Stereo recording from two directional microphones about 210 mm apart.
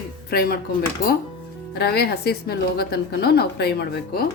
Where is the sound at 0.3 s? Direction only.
45° left (ahead or behind).